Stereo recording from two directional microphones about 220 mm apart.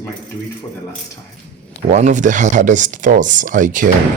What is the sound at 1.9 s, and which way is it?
Speech, 35° right (ahead or behind).